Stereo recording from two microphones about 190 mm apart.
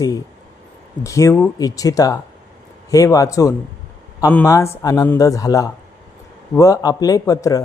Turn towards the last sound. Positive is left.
turn(degrees=15)  # may be behind; listen again after turning